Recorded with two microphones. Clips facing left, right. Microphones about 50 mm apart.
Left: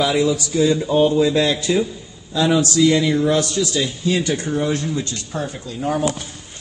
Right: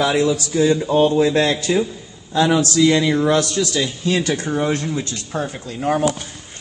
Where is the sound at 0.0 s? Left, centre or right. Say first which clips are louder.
Even; right.